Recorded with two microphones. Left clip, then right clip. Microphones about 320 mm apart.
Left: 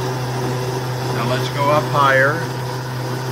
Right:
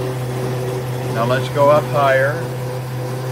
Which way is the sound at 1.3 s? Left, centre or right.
Centre.